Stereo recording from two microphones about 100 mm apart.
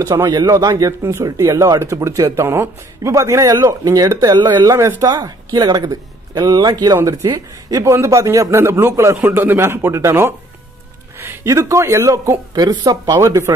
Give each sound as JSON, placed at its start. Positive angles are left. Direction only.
{"t": 0.0, "sound": "a man's voice", "side_deg": -35}
{"t": 12.5, "sound": "speech", "side_deg": -40}